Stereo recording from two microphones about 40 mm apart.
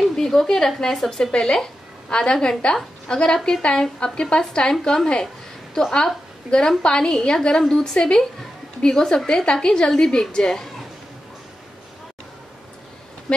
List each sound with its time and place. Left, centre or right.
0.1 s a woman's voice: centre